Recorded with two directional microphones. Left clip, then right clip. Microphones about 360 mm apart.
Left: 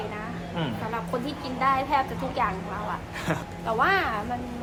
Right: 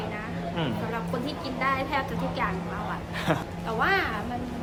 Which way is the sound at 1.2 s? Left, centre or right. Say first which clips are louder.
Left 4 dB; centre.